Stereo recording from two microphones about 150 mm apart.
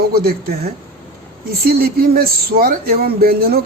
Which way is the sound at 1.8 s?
85° right.